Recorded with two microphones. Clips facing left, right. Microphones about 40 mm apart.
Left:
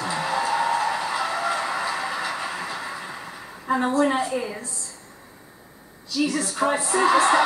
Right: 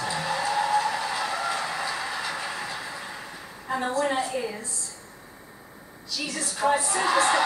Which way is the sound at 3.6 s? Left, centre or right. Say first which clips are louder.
Left 5 dB; centre.